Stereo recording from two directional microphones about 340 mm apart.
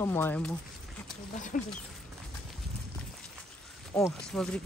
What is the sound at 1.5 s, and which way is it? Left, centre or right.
Speech, left.